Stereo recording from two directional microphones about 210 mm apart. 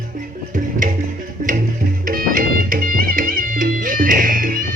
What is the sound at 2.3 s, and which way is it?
Music, 40° right (ahead or behind).